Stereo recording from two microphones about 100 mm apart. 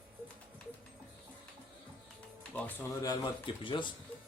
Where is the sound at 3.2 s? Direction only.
55° left (ahead or behind).